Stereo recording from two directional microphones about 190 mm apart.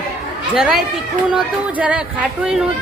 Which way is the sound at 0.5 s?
Centre (ahead or behind).